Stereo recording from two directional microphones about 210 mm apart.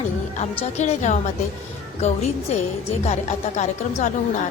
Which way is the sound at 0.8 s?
35° left (ahead or behind).